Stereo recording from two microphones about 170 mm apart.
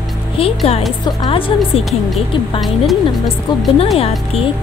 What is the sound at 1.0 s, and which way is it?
Speech, 25° left (ahead or behind).